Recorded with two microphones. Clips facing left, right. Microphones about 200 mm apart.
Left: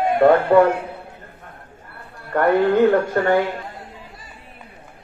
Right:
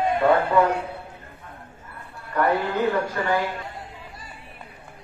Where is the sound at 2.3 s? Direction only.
50° left (ahead or behind).